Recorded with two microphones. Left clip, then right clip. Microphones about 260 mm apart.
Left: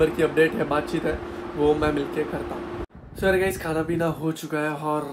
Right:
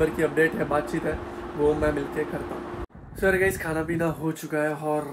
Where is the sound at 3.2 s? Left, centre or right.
Centre.